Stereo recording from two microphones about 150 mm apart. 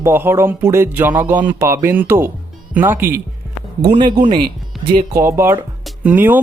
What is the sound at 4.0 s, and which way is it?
Speech, 30° right (ahead or behind).